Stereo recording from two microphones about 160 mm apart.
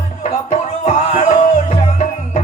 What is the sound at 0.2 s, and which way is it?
Music, 45° left (ahead or behind).